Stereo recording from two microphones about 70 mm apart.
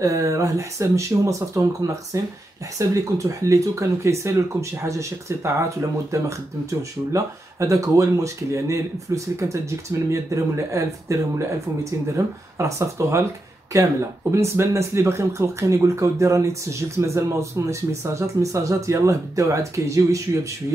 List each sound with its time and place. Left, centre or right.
0.0 s speech: right